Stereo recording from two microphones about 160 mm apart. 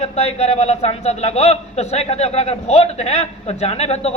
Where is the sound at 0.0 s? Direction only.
40° left (ahead or behind).